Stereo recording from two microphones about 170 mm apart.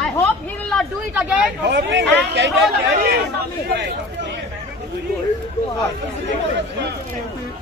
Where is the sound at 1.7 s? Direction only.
90° right.